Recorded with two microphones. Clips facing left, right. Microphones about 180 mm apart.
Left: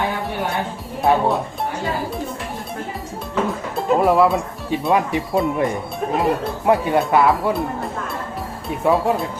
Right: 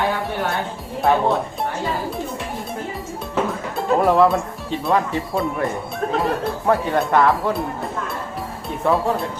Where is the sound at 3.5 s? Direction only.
Centre (ahead or behind).